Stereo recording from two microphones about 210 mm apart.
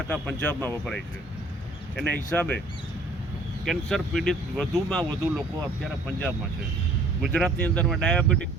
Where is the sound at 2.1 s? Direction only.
10° left (ahead or behind).